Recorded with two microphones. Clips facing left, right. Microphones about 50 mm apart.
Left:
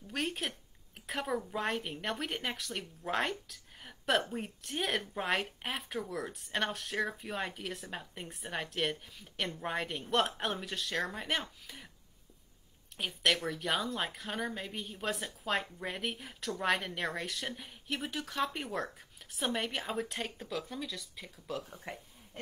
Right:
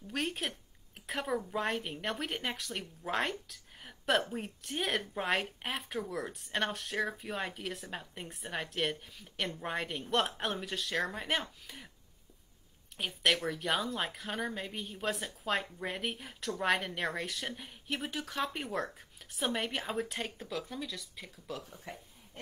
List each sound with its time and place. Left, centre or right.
0.1 s speech: centre
12.9 s speech: centre
21.6 s speech: left